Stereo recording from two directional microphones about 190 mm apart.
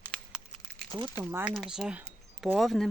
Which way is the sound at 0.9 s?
25° right (ahead or behind).